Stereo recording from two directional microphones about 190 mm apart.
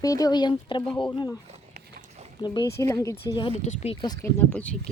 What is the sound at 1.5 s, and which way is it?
Horse, 35° right (ahead or behind).